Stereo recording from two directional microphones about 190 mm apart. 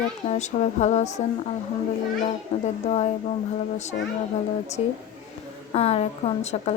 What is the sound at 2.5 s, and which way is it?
Speech, 35° left (ahead or behind).